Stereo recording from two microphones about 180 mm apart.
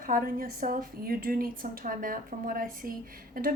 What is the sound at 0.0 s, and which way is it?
A woman's voice, 50° right (ahead or behind).